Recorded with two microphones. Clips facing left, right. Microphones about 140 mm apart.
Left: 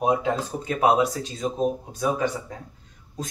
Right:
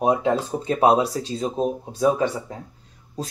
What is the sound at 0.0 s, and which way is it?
Speech, 30° right (ahead or behind).